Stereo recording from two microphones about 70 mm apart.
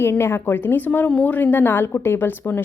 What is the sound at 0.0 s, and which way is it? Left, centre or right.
A woman's voice, left.